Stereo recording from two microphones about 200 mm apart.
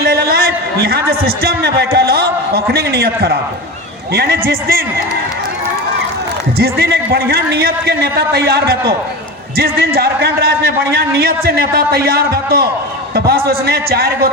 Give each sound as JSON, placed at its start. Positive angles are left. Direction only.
{"t": 0.0, "sound": "a man's voice", "side_deg": -50}
{"t": 6.6, "sound": "a man's voice", "side_deg": -50}